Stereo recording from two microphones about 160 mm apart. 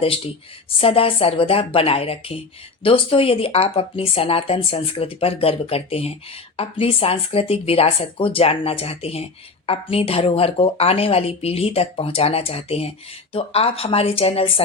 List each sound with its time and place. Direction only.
0.8 s speech: 35° left (ahead or behind)